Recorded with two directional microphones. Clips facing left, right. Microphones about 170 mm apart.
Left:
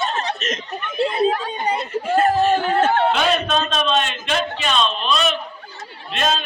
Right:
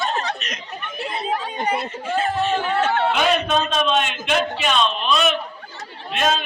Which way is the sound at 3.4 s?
10° right (ahead or behind).